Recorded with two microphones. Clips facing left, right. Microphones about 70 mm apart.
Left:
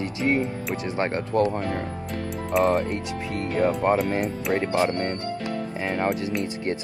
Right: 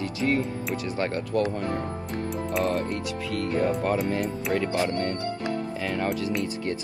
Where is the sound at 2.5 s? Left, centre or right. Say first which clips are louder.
Left 6 dB; left.